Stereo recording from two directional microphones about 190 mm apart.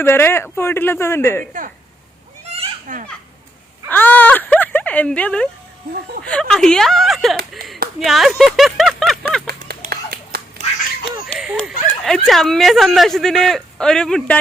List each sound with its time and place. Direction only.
0.0 s speech: 10° left (ahead or behind)
2.5 s goat: 40° right (ahead or behind)
3.8 s speech: 10° left (ahead or behind)
9.5 s a sound: 55° right (ahead or behind)
11.6 s speech: centre (ahead or behind)